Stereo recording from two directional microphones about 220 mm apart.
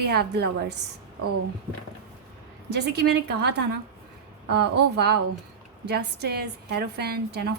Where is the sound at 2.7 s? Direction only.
50° right (ahead or behind).